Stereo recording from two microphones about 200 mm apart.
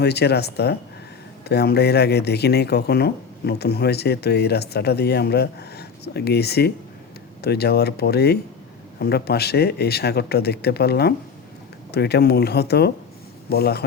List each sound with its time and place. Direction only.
0.0 s speech: 55° left (ahead or behind)